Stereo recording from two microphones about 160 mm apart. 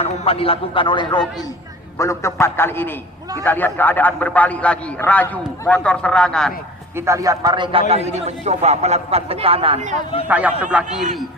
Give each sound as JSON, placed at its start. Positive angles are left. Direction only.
{"t": 0.0, "sound": "a man's voice", "side_deg": 40}
{"t": 2.0, "sound": "a man's voice", "side_deg": 15}
{"t": 6.9, "sound": "a man's voice", "side_deg": -20}
{"t": 10.2, "sound": "a man's voice", "side_deg": -10}